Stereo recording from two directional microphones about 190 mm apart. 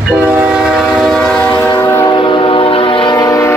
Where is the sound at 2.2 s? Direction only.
25° left (ahead or behind).